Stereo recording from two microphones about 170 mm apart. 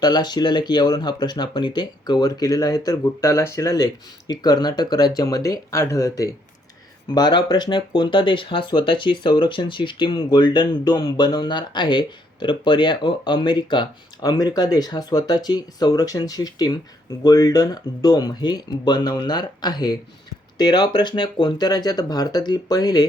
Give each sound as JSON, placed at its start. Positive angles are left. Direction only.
{"t": 0.0, "sound": "speech", "side_deg": 25}